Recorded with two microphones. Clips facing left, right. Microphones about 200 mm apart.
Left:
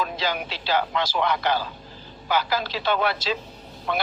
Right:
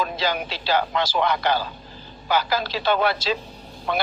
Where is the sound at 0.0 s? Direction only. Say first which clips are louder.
Right 2 dB; 35° right (ahead or behind).